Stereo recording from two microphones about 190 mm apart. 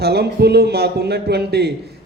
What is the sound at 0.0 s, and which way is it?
A man's voice, 60° right (ahead or behind).